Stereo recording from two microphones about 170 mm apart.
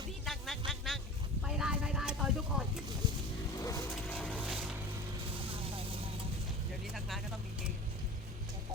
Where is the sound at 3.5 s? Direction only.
20° left (ahead or behind).